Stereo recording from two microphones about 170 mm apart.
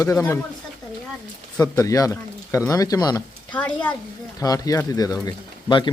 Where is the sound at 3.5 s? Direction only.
10° left (ahead or behind).